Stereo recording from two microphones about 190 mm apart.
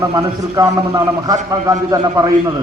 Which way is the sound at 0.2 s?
20° right (ahead or behind).